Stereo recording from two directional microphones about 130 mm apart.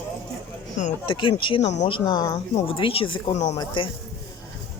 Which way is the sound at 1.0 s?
40° left (ahead or behind).